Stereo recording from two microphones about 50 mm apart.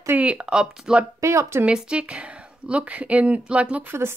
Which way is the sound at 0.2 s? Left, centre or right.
Right.